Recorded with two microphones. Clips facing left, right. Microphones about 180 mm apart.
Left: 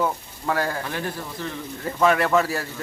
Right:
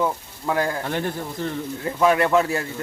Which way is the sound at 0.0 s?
5° right (ahead or behind).